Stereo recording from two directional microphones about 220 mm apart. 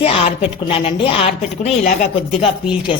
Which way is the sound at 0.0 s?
25° left (ahead or behind).